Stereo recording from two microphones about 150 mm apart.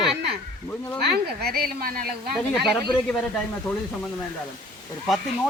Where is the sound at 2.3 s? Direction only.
Centre (ahead or behind).